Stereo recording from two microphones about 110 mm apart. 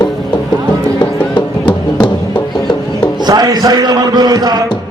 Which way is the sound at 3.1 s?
40° right (ahead or behind).